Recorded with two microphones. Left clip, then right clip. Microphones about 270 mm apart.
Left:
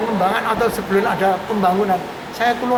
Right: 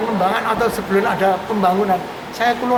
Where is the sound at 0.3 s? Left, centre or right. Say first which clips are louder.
Even; centre.